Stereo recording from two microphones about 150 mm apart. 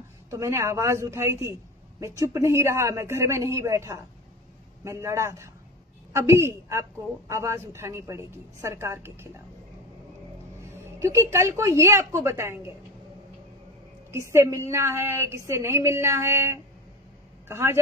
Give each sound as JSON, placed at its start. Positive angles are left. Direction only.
{"t": 0.3, "sound": "a woman's voice", "side_deg": -20}
{"t": 11.0, "sound": "a woman's voice", "side_deg": -20}
{"t": 14.3, "sound": "a woman's voice", "side_deg": -20}